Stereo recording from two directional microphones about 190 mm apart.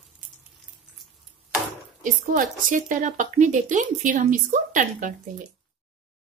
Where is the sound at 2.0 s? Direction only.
45° right (ahead or behind).